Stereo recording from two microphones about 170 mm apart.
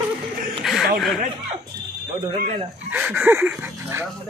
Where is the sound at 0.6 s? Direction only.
Centre (ahead or behind).